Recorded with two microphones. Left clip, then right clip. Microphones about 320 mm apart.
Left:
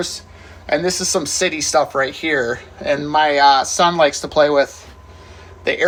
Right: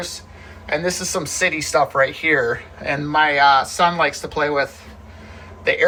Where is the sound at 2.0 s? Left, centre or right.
Centre.